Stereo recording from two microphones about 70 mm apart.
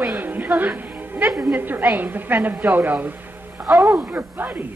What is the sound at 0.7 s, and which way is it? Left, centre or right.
Music, right.